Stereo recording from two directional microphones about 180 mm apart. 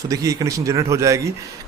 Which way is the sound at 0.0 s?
20° right (ahead or behind).